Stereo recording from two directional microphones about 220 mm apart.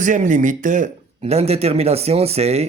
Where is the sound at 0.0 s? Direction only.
35° right (ahead or behind).